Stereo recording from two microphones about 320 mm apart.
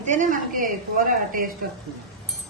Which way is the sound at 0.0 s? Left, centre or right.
Right.